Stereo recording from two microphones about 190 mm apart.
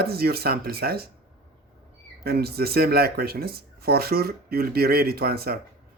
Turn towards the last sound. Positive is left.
turn(degrees=-55)  # may be behind; listen again after turning